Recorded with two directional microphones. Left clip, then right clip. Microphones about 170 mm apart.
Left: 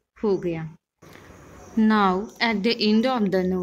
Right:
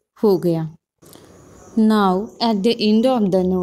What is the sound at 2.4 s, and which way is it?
A woman's voice, 40° right (ahead or behind).